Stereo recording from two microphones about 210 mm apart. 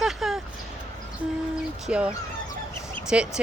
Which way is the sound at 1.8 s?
5° right (ahead or behind).